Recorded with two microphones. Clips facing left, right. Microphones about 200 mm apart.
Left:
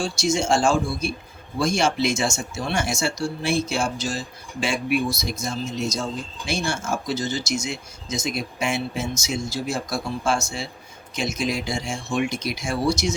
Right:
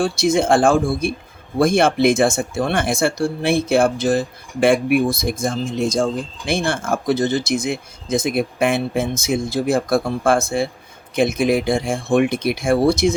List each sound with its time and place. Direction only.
0.0 s speech: 55° right (ahead or behind)